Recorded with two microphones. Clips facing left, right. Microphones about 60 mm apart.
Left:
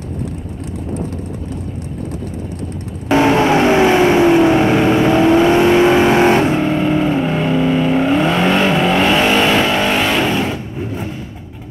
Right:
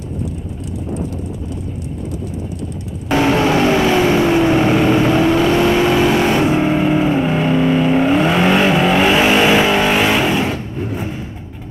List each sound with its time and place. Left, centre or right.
3.2 s vehicle: left
4.6 s vehicle: centre
5.3 s vehicle: left
6.5 s vehicle: centre